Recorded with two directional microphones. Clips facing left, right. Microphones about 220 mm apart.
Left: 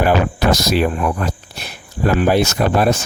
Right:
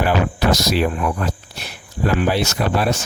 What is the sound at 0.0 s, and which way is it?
Speech, 50° left (ahead or behind).